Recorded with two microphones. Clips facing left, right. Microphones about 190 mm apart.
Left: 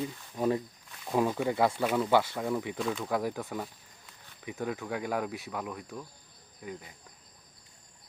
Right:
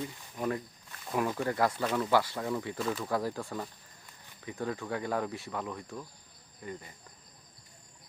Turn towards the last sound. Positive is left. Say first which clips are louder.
# even
turn(degrees=5)  # may be behind; listen again after turning